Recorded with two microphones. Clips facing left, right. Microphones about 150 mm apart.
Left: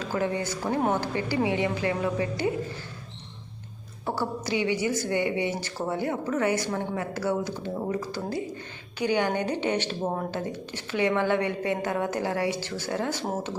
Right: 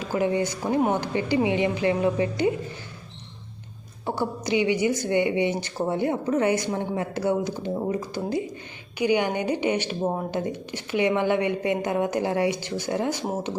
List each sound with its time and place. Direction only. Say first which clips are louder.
0.0 s a woman's voice: right 4 dB; 15° right (ahead or behind)
4.0 s a woman's voice: right 2 dB; 20° right (ahead or behind)